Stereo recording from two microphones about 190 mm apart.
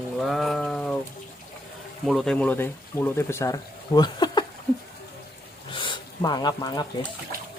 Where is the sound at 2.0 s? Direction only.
Centre (ahead or behind); by 4.4 s 20° left (ahead or behind).